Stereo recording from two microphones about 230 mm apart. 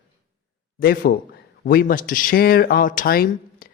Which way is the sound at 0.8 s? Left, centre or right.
Left.